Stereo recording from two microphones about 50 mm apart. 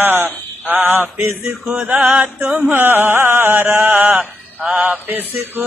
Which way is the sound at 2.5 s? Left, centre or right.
Right.